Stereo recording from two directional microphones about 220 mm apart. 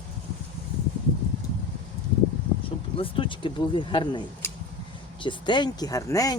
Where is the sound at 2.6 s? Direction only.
25° left (ahead or behind).